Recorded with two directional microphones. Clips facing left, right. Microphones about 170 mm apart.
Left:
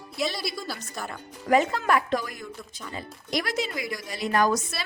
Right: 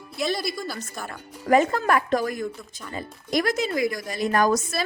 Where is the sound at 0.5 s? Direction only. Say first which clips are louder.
Right 2 dB; 50° right (ahead or behind).